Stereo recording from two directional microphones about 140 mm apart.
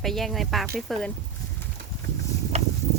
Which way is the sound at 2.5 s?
50° right (ahead or behind).